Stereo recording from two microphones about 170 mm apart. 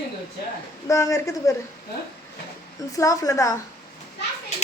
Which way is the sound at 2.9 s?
20° left (ahead or behind).